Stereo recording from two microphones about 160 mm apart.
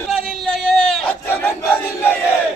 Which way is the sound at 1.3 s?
15° left (ahead or behind).